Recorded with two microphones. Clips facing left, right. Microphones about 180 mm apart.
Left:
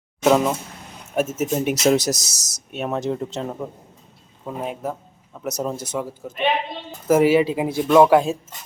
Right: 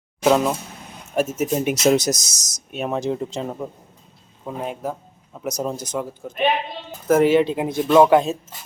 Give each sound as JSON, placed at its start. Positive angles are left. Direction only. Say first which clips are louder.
{"t": 0.3, "sound": "speech", "louder": "even", "side_deg": 0}
{"t": 2.2, "sound": "speech", "louder": "even", "side_deg": -45}
{"t": 2.7, "sound": "speech", "louder": "right 1 dB", "side_deg": 0}